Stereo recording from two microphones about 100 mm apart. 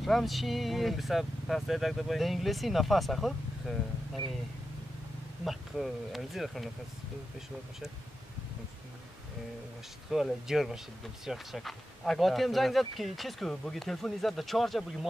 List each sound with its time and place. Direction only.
0.0 s speech: centre (ahead or behind)
5.4 s speech: centre (ahead or behind)
10.1 s speech: 5° right (ahead or behind)